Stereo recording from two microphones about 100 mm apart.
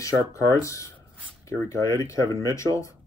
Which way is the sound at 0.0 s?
35° left (ahead or behind).